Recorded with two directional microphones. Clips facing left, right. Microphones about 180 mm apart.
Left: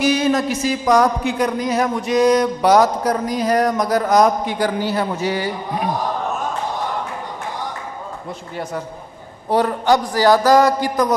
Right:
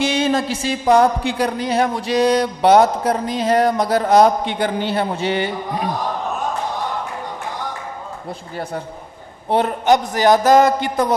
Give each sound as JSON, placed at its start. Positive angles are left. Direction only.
{"t": 0.0, "sound": "speech", "side_deg": -25}
{"t": 9.5, "sound": "speech", "side_deg": -20}